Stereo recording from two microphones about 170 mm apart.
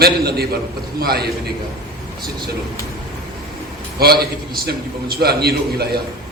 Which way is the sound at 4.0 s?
65° right (ahead or behind).